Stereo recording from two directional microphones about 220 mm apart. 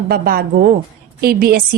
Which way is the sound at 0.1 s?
40° right (ahead or behind).